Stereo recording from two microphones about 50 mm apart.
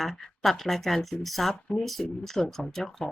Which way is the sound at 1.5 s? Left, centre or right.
Left.